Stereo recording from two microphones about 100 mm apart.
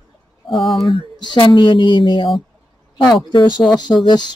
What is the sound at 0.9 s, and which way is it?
Speech, 55° left (ahead or behind).